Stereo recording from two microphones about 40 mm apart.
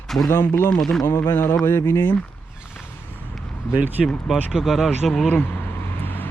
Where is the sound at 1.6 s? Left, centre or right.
Left.